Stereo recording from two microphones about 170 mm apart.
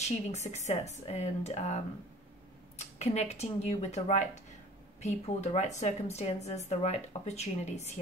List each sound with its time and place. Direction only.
0.3 s speech: 40° left (ahead or behind)
2.8 s speech: 40° left (ahead or behind)